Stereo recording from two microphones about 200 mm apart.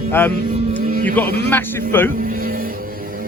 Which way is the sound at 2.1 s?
45° right (ahead or behind).